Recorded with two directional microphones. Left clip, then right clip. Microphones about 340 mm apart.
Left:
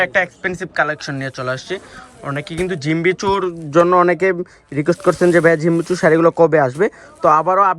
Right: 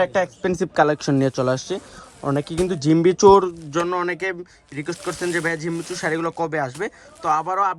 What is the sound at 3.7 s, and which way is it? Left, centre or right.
Speech, centre.